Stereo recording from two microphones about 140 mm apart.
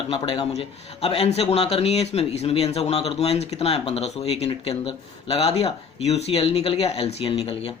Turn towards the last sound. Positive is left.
turn(degrees=45)  # may be behind; listen again after turning